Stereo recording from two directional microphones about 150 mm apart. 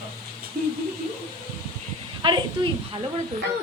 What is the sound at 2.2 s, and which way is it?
Speech, 35° right (ahead or behind).